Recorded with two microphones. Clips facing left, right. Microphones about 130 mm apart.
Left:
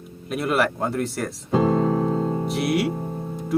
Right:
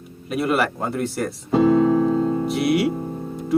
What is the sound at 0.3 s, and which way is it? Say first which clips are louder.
Speech: right 1 dB; centre (ahead or behind).